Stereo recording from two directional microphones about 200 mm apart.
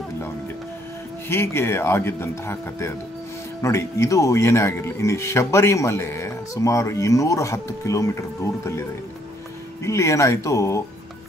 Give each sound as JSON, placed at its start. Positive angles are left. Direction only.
{"t": 1.3, "sound": "speech", "side_deg": 10}
{"t": 9.8, "sound": "speech", "side_deg": 15}